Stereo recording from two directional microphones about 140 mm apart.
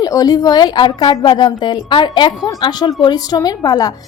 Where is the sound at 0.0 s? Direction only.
25° left (ahead or behind).